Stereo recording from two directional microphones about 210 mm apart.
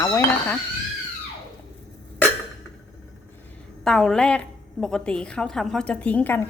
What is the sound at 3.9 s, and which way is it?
A woman's voice, 5° left (ahead or behind).